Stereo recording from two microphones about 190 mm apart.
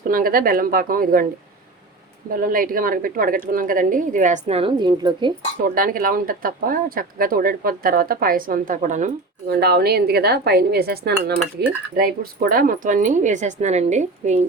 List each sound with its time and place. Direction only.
0.1 s speech: 50° right (ahead or behind)
2.3 s speech: 45° right (ahead or behind); by 5.3 s 25° right (ahead or behind)
5.6 s speech: 50° right (ahead or behind)
9.6 s cutlery: 55° right (ahead or behind)
11.9 s speech: 50° right (ahead or behind)